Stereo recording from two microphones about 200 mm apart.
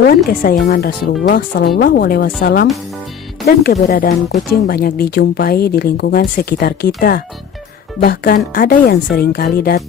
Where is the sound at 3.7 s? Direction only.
45° left (ahead or behind).